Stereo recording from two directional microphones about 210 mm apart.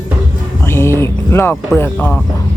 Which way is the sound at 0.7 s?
10° left (ahead or behind).